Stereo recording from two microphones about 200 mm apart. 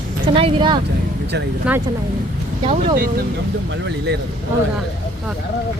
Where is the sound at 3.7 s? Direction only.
60° right (ahead or behind).